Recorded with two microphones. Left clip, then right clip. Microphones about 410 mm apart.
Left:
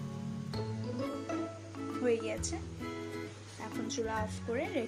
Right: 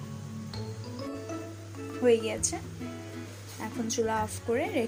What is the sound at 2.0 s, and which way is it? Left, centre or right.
Speech, left.